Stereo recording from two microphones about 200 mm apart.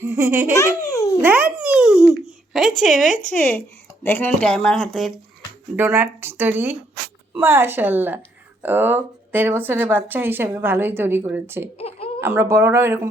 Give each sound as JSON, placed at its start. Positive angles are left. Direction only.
{"t": 0.0, "sound": "speech", "side_deg": -15}
{"t": 1.2, "sound": "babbling", "side_deg": -5}
{"t": 2.5, "sound": "speech", "side_deg": 0}
{"t": 3.1, "sound": "speech", "side_deg": 40}
{"t": 3.3, "sound": "speech", "side_deg": 10}
{"t": 5.7, "sound": "speech", "side_deg": -10}
{"t": 11.8, "sound": "a sound", "side_deg": 30}
{"t": 12.2, "sound": "speech", "side_deg": -10}